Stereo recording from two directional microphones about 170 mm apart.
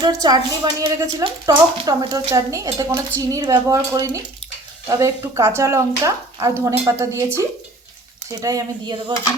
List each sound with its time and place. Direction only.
0.0 s speech: 25° right (ahead or behind)